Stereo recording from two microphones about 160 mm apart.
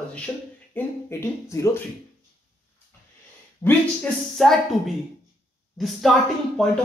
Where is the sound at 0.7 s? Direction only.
15° left (ahead or behind).